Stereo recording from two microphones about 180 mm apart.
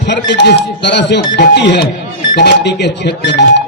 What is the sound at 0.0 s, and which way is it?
Speech, 70° left (ahead or behind).